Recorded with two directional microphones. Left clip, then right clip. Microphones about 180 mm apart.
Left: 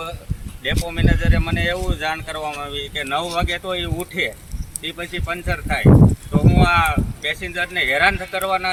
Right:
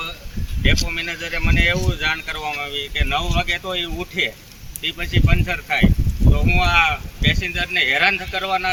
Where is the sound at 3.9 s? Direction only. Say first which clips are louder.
Right 1 dB; 5° right (ahead or behind).